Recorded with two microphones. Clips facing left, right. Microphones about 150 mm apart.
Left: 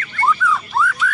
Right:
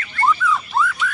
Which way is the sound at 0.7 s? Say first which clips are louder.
Left 1 dB; centre (ahead or behind).